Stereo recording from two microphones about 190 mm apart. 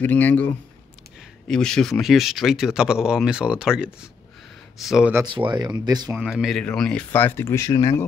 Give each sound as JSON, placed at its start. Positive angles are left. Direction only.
{"t": 0.0, "sound": "speech", "side_deg": 10}
{"t": 5.5, "sound": "speech", "side_deg": -20}
{"t": 6.1, "sound": "speech", "side_deg": 0}